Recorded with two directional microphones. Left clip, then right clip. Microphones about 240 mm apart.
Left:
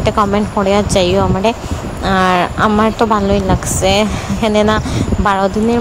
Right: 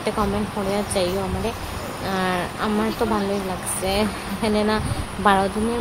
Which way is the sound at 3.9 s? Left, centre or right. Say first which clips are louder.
Left 10 dB; left.